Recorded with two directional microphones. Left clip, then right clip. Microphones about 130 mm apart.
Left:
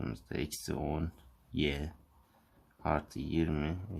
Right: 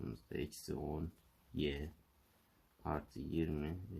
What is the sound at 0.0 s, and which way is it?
Speech, 35° left (ahead or behind).